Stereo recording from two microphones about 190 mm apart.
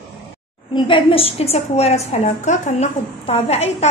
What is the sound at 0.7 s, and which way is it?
A woman's voice, 25° left (ahead or behind).